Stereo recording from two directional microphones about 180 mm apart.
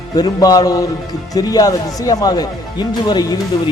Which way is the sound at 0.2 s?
20° left (ahead or behind).